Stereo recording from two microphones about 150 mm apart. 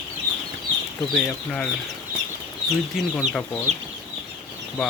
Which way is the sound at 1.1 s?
5° left (ahead or behind).